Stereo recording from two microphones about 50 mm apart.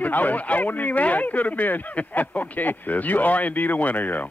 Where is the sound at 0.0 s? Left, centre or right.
Left.